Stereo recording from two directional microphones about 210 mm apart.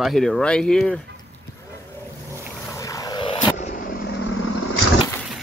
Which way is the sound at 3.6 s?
40° left (ahead or behind).